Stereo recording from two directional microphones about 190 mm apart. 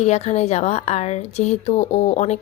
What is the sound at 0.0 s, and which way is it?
Speech, 35° left (ahead or behind).